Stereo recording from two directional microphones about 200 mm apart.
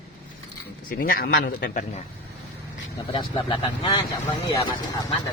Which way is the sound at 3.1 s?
25° left (ahead or behind).